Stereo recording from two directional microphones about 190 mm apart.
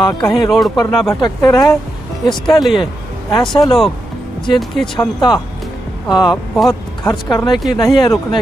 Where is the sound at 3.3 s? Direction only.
20° left (ahead or behind).